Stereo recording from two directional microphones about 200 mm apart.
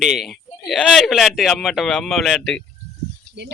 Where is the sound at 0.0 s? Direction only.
Centre (ahead or behind).